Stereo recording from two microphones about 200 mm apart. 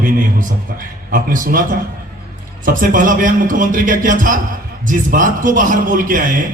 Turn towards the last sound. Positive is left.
turn(degrees=-40)  # may be behind; listen again after turning